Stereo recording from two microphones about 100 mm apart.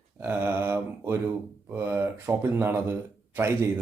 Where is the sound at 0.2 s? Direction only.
20° right (ahead or behind).